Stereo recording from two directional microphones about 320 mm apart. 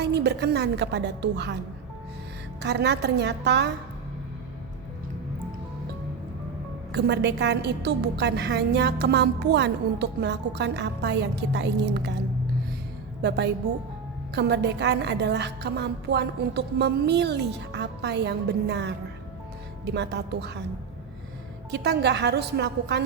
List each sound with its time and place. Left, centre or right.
0.0 s a woman's voice: right
2.6 s a woman's voice: right
6.9 s a woman's voice: right
13.2 s a woman's voice: right
21.7 s a woman's voice: right